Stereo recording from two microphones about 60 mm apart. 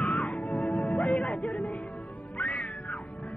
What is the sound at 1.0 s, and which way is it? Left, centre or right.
Music, centre.